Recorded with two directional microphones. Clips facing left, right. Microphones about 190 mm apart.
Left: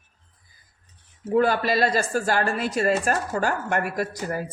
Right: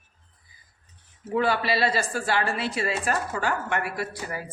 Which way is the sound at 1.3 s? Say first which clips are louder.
Left 4 dB; 45° left (ahead or behind).